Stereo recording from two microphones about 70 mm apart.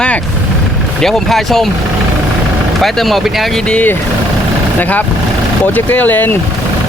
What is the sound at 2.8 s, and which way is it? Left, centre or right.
Speech, centre.